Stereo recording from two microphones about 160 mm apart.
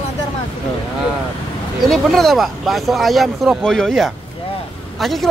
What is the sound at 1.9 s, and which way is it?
Speech, centre (ahead or behind).